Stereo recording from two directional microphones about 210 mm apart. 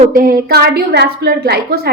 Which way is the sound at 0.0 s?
40° right (ahead or behind).